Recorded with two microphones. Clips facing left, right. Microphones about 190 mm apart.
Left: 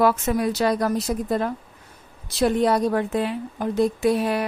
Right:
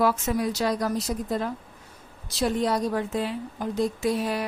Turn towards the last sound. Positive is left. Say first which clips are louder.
# left 5 dB
turn(degrees=60)  # may be behind; listen again after turning